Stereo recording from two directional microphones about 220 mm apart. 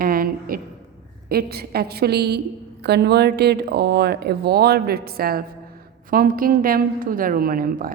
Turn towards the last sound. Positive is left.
turn(degrees=-40)  # may be behind; listen again after turning